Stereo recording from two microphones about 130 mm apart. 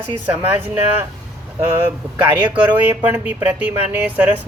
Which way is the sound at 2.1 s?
10° right (ahead or behind).